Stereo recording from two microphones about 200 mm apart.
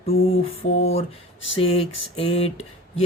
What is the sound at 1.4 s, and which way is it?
Speech, 70° left (ahead or behind).